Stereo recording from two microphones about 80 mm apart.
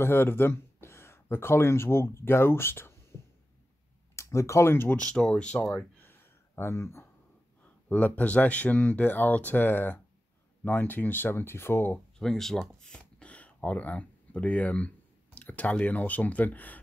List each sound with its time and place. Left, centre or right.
0.0 s speech: left
3.1 s a sound: left
4.1 s speech: left
4.9 s speech: centre
5.7 s a sound: left
7.9 s speech: centre
12.2 s speech: centre
13.2 s speech: centre